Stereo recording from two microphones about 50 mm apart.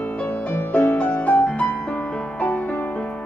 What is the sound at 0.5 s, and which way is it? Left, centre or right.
Music, left.